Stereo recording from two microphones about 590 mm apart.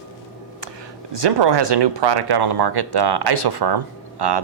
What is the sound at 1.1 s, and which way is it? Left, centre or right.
Speech, right.